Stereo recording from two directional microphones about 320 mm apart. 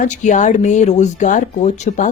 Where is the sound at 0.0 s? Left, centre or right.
Left.